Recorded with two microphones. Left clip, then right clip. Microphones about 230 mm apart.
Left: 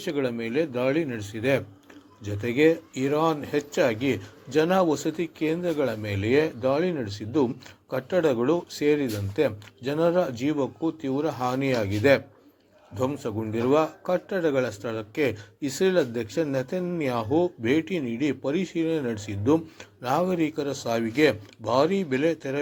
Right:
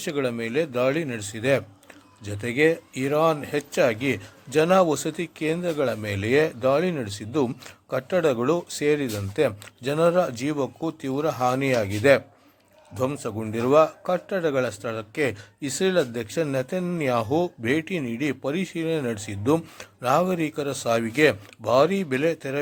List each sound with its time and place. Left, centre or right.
0.0 s speech: right